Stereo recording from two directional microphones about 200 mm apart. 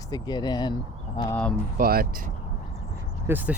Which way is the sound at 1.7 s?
50° right (ahead or behind).